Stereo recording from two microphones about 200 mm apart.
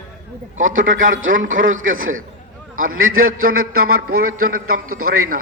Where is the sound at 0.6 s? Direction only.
80° right.